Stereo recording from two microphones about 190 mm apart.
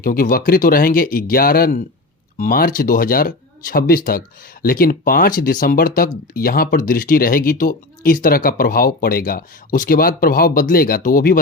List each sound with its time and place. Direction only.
0.0 s speech: 50° left (ahead or behind)